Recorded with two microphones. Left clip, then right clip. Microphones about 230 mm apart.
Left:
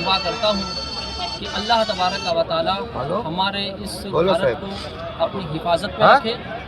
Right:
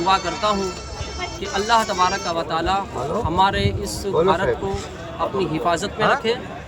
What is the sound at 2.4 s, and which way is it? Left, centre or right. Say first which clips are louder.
Speech: left 1 dB; centre.